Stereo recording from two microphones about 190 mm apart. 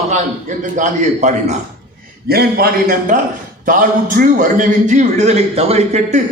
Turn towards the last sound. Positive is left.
turn(degrees=-35)  # may be behind; listen again after turning